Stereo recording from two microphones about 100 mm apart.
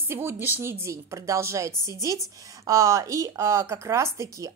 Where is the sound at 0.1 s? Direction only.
25° right (ahead or behind).